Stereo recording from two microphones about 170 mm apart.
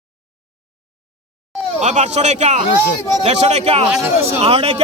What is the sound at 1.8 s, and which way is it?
A man's voice, 40° right (ahead or behind).